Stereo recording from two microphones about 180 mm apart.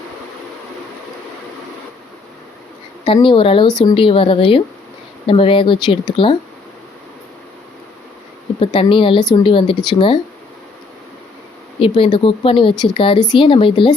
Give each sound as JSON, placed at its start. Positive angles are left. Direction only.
{"t": 3.2, "sound": "speech", "side_deg": 30}
{"t": 8.6, "sound": "speech", "side_deg": 30}
{"t": 11.8, "sound": "speech", "side_deg": 30}